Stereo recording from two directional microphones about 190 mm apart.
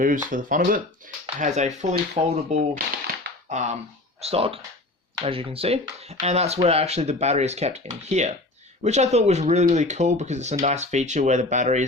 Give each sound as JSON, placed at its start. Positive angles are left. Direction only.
{"t": 0.0, "sound": "speech", "side_deg": -45}